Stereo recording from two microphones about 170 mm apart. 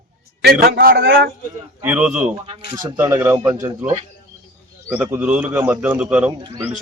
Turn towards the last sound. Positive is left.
turn(degrees=-25)  # may be behind; listen again after turning